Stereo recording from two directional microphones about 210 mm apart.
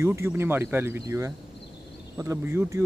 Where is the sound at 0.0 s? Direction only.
10° right (ahead or behind).